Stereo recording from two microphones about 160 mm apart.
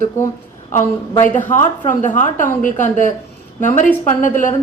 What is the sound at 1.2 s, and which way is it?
A woman's voice, 50° left (ahead or behind).